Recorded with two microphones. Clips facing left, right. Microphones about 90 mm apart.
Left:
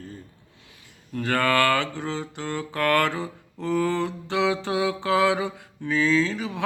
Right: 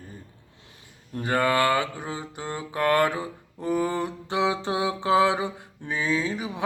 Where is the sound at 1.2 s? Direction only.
15° right (ahead or behind).